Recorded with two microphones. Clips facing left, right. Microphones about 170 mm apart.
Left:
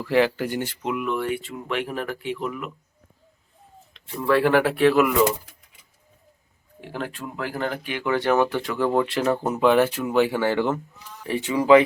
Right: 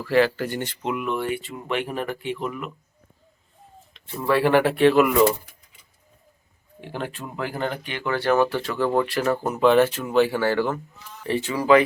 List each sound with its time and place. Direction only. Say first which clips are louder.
0.0 s speech: right 1 dB; 15° left (ahead or behind)
3.9 s speech: left 1 dB; centre (ahead or behind)
6.8 s speech: even; centre (ahead or behind); by 11.8 s 20° left (ahead or behind)